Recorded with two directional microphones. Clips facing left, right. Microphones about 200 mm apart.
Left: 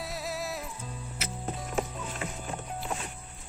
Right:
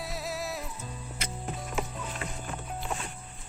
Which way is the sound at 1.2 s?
5° left (ahead or behind).